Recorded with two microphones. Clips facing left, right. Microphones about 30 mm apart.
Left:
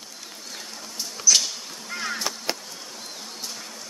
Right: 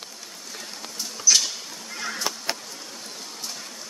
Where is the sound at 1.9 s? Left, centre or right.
Left.